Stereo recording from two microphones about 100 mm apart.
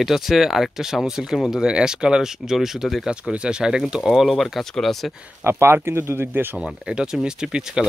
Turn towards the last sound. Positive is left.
turn(degrees=-10)  # may be behind; listen again after turning